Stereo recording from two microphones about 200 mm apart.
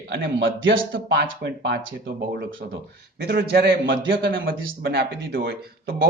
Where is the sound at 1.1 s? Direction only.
60° right (ahead or behind).